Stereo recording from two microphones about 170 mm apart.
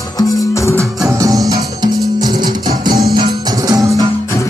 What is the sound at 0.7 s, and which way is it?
Music, 20° right (ahead or behind).